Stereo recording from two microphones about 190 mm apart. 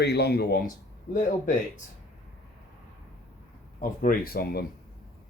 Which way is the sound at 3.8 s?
45° left (ahead or behind).